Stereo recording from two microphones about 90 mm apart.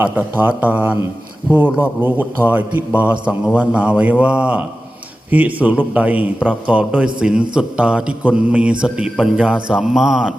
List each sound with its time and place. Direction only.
0.0 s a man's voice: 20° right (ahead or behind)